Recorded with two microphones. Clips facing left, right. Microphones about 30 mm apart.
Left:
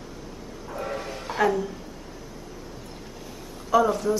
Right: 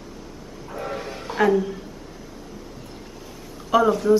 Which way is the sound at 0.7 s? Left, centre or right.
Centre.